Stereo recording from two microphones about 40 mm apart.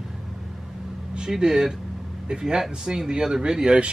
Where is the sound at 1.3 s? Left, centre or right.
Centre.